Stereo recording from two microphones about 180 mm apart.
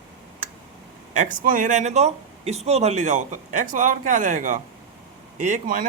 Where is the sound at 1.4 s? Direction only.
50° right (ahead or behind).